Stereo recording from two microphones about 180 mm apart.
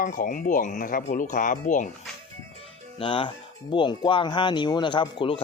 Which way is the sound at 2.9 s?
30° left (ahead or behind).